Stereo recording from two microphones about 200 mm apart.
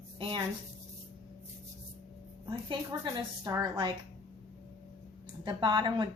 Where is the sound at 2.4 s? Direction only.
25° right (ahead or behind).